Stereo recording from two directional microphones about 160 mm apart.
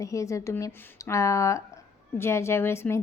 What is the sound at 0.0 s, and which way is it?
A woman's voice, 20° left (ahead or behind).